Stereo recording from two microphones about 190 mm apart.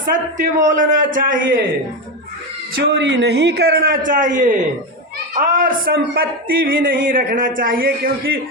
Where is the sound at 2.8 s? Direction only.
65° right (ahead or behind); by 8.3 s 50° right (ahead or behind).